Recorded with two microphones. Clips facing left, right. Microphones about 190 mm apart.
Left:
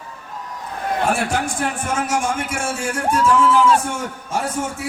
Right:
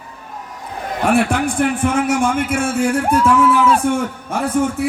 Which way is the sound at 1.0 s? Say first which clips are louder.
Right 7 dB; 60° right (ahead or behind).